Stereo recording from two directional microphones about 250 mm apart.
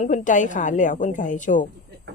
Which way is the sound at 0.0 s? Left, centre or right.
Left.